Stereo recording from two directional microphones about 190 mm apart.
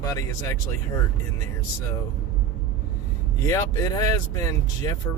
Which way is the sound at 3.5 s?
15° left (ahead or behind).